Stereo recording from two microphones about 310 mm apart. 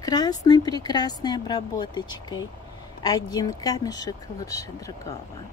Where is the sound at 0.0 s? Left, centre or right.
Centre.